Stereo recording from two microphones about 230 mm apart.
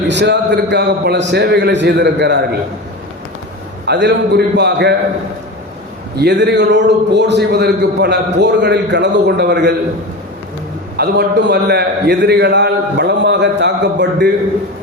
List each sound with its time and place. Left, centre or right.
0.1 s a man's voice: right
3.8 s a man's voice: right
6.1 s a man's voice: right
10.9 s a man's voice: right